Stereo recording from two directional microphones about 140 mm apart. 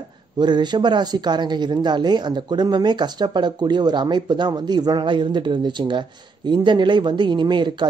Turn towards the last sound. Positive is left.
turn(degrees=-35)  # may be behind; listen again after turning